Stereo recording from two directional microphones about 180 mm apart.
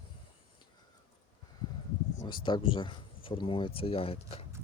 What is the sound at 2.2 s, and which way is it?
Speech, 25° left (ahead or behind).